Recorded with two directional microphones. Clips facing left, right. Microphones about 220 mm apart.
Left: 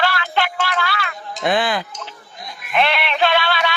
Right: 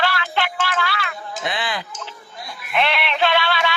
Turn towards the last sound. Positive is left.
turn(degrees=45)  # may be behind; listen again after turning